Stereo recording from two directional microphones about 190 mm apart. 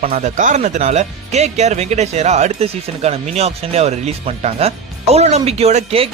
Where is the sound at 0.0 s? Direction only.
40° right (ahead or behind).